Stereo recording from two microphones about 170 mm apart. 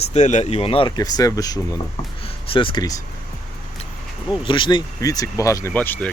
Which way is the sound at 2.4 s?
30° left (ahead or behind).